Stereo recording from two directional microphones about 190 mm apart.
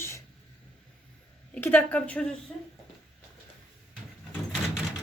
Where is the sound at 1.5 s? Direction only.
10° left (ahead or behind).